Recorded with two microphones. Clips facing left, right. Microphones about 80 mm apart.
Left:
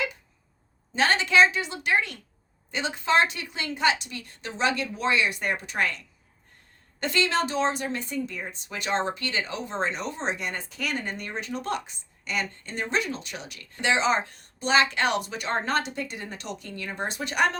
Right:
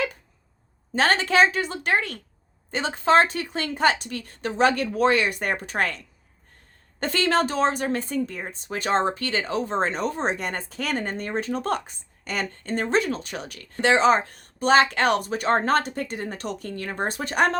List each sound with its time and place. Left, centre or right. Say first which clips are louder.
0.9 s a woman's voice: right 1 dB; right
7.0 s a woman's voice: right 3 dB; right